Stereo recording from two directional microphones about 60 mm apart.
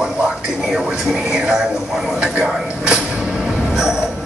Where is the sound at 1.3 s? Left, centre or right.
Centre.